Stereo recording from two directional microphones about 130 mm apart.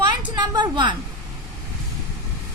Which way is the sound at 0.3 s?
35° right (ahead or behind).